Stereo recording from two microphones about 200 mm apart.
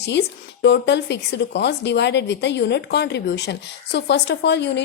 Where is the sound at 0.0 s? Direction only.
60° left (ahead or behind).